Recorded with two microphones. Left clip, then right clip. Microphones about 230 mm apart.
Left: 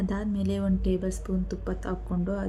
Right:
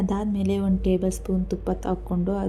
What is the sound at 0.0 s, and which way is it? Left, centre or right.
Speech, centre.